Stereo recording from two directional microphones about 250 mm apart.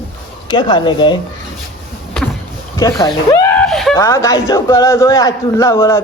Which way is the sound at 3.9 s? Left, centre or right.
Centre.